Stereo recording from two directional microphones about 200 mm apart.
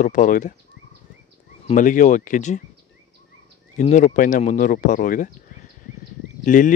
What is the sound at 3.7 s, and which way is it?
Speech, 35° left (ahead or behind).